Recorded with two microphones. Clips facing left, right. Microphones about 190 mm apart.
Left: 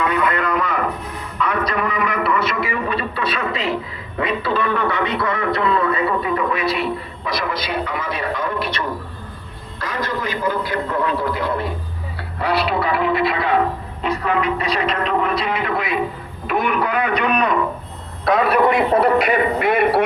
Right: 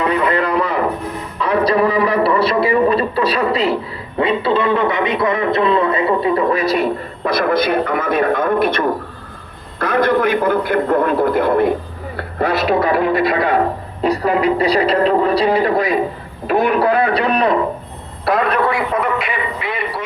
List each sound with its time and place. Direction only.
0.0 s a sound: 30° right (ahead or behind)
1.4 s a man's voice: 30° right (ahead or behind)
18.3 s a man's voice: 5° left (ahead or behind)
18.9 s speech: 35° left (ahead or behind); by 20.1 s 60° left (ahead or behind)